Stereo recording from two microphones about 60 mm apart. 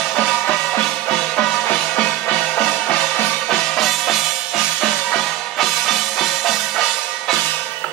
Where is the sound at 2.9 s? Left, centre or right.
Left.